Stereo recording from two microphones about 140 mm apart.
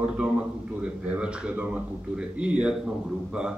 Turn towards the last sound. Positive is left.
turn(degrees=-5)  # may be behind; listen again after turning